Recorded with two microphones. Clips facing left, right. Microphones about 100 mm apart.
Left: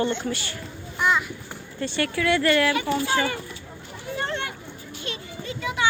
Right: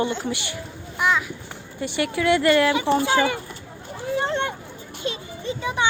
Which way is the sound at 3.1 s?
10° right (ahead or behind).